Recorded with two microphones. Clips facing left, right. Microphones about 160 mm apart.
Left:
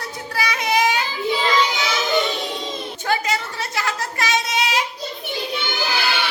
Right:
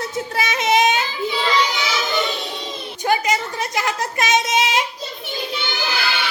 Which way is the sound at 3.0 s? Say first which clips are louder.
Right 4 dB; 15° right (ahead or behind).